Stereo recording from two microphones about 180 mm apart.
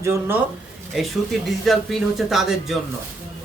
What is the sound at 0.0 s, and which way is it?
Speech, 15° right (ahead or behind).